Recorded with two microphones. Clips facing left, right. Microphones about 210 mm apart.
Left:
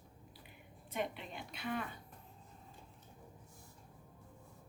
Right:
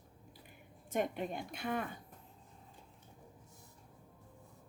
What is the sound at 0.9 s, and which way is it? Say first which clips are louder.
Speech: right 5 dB; 50° right (ahead or behind).